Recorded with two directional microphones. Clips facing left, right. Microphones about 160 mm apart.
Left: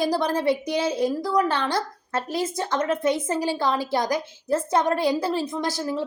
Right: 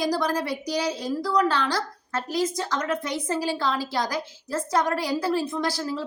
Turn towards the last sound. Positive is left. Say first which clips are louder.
# left 1 dB
turn(degrees=20)  # may be behind; listen again after turning